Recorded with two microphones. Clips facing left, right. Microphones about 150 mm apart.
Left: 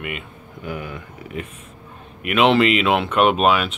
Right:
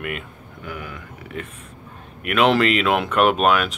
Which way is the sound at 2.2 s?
5° left (ahead or behind).